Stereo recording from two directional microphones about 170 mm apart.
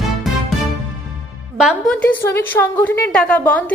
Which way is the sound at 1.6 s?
Centre (ahead or behind).